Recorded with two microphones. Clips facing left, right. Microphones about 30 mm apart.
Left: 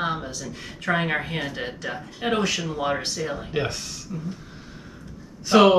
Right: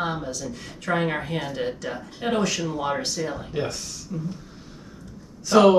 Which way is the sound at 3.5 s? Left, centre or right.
Left.